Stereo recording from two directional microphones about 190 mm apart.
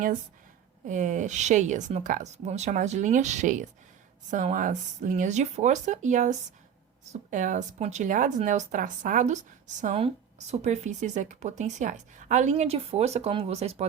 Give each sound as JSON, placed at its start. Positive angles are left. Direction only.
{"t": 0.9, "sound": "a woman's voice", "side_deg": -40}